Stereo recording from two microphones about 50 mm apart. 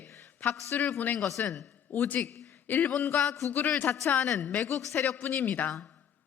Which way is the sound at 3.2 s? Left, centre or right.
Left.